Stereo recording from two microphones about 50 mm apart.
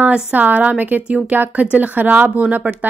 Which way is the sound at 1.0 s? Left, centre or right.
Centre.